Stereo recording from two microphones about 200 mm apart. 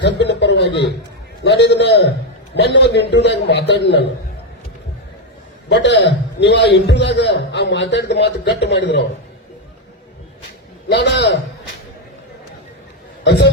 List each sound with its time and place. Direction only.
0.0 s chuckle: 60° left (ahead or behind)
1.5 s a man's voice: 60° left (ahead or behind)
5.6 s a man's voice: 60° left (ahead or behind)
10.8 s a man's voice: 55° left (ahead or behind)
13.2 s a man's voice: 55° left (ahead or behind)